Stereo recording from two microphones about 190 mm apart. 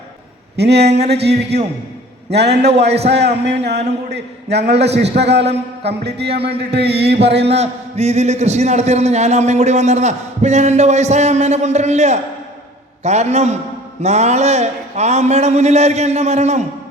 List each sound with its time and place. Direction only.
0.5 s a man's voice: 60° right (ahead or behind)
7.4 s a man's voice: 35° right (ahead or behind)